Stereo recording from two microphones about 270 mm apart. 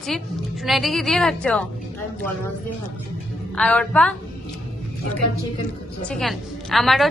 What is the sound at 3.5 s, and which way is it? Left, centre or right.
Speech, centre.